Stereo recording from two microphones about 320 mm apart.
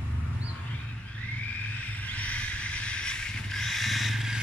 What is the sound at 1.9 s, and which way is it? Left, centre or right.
Vehicle, centre.